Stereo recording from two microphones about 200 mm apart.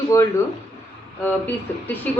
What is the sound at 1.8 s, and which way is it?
Speech, 10° left (ahead or behind).